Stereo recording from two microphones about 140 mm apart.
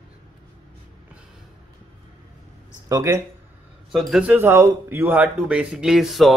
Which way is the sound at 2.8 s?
25° right (ahead or behind).